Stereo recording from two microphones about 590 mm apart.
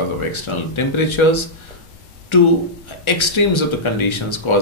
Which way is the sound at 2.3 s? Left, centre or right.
Left.